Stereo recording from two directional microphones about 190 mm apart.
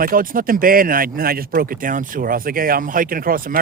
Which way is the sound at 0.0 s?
45° right (ahead or behind).